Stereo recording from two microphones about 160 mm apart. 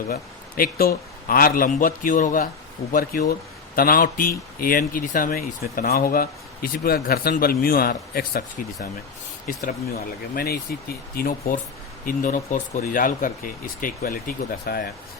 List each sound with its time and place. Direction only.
0.1 s speech: 65° left (ahead or behind)
9.5 s speech: 55° left (ahead or behind)
10.3 s speech: 75° left (ahead or behind)
11.2 s speech: 60° left (ahead or behind)